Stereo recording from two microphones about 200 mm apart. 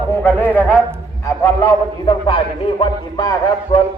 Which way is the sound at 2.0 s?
25° left (ahead or behind).